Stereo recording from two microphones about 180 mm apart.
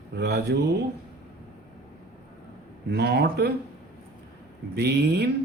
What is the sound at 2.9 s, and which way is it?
Speech, 70° right (ahead or behind).